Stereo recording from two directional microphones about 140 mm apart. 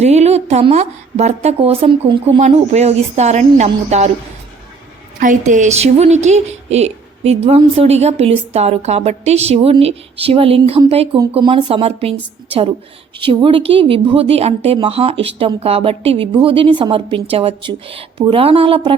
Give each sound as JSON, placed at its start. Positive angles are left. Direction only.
{"t": 0.0, "sound": "a woman's voice", "side_deg": -50}
{"t": 2.4, "sound": "a woman's voice", "side_deg": -50}
{"t": 5.2, "sound": "a woman's voice", "side_deg": -60}
{"t": 13.2, "sound": "speech", "side_deg": -40}